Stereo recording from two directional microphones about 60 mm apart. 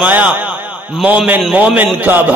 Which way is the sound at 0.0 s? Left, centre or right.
Right.